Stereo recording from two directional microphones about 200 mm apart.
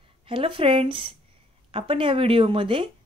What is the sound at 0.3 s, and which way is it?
Speech, 25° right (ahead or behind).